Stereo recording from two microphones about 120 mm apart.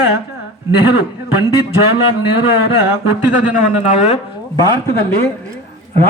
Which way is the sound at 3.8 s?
65° left (ahead or behind).